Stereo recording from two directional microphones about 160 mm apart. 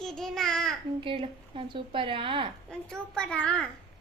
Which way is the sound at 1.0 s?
35° right (ahead or behind).